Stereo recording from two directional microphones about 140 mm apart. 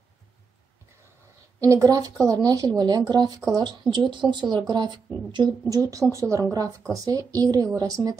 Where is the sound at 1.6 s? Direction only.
25° right (ahead or behind).